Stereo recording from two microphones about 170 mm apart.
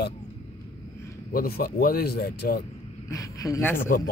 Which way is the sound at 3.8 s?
55° left (ahead or behind).